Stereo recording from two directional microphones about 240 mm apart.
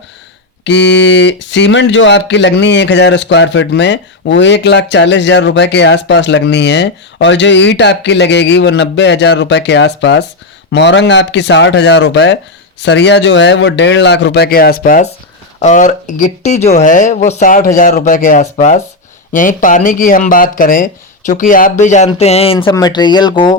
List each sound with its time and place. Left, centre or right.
0.6 s speech: left
22.5 s speech: centre